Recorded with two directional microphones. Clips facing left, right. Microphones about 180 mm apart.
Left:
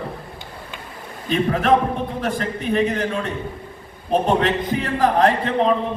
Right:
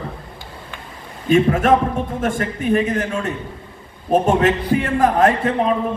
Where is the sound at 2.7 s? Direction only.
45° right (ahead or behind).